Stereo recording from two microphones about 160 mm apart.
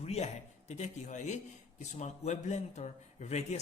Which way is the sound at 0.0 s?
40° left (ahead or behind).